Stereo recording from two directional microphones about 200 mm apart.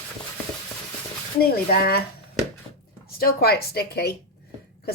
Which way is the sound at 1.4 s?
50° left (ahead or behind).